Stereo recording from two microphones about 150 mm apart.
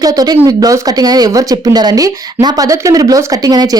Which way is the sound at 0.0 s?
25° right (ahead or behind).